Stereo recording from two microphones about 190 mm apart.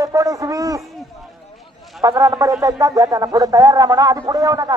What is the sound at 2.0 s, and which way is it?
Speech, 20° right (ahead or behind).